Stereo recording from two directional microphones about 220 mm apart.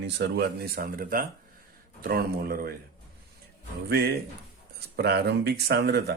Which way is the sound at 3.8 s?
45° right (ahead or behind).